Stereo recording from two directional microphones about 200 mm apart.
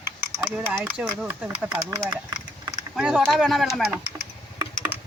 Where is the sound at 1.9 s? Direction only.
20° right (ahead or behind).